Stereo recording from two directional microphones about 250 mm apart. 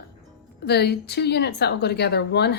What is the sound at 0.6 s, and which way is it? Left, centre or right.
A woman's voice, left.